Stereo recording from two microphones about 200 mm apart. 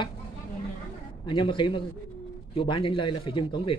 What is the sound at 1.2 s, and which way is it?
Speech, 25° left (ahead or behind).